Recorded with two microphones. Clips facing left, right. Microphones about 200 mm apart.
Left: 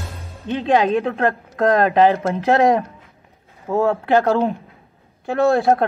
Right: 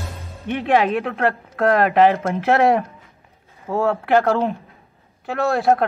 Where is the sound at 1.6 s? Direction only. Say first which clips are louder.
Left 1 dB; 20° left (ahead or behind).